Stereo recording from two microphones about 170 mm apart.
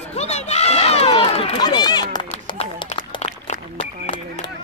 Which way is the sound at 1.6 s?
25° left (ahead or behind).